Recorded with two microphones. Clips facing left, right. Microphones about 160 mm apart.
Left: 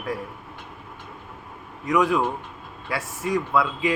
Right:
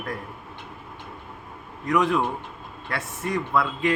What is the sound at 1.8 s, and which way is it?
A man's voice, 5° left (ahead or behind).